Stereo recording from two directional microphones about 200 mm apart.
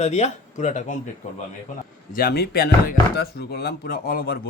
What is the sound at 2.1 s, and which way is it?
Speech, 50° left (ahead or behind).